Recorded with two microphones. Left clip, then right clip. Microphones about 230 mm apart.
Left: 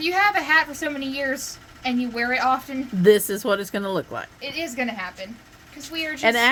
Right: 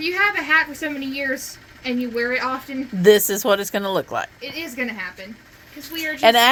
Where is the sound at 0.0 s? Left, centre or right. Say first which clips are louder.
Even; centre.